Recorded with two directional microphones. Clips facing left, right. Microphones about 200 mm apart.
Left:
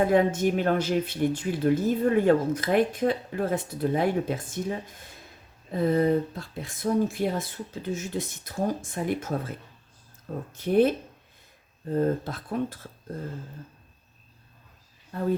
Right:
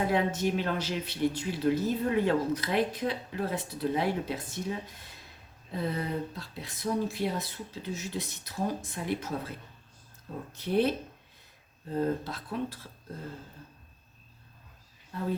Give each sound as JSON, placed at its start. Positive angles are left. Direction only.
{"t": 0.1, "sound": "speech", "side_deg": 50}
{"t": 10.6, "sound": "speech", "side_deg": 50}
{"t": 11.9, "sound": "speech", "side_deg": 50}